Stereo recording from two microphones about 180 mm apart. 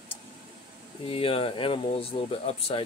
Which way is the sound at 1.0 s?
30° left (ahead or behind).